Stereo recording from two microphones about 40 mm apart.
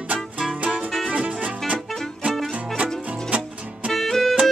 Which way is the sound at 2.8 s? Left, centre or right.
Right.